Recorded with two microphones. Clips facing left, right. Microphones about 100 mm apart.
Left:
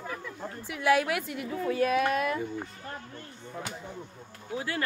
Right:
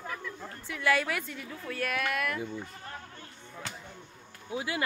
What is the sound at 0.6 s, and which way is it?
A woman's voice, 15° left (ahead or behind).